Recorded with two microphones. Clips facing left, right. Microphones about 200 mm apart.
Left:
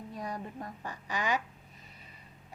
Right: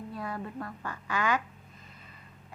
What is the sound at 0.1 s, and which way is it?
Speech, 15° left (ahead or behind).